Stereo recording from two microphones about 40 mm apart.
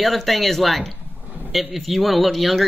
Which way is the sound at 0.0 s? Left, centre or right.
Centre.